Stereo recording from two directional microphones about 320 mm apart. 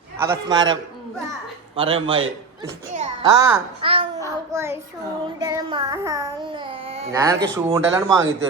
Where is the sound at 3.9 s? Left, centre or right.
Centre.